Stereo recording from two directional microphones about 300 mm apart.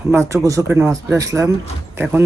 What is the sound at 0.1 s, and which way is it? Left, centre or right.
Speech, centre.